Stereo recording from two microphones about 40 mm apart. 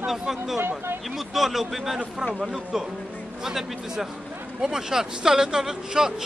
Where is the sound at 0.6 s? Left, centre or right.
Right.